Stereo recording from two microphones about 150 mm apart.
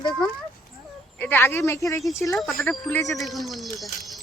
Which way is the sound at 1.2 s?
15° left (ahead or behind).